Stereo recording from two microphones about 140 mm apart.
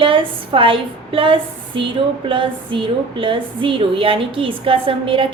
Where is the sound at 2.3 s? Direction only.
40° right (ahead or behind).